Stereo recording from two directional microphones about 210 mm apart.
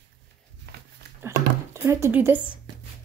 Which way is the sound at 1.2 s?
10° right (ahead or behind).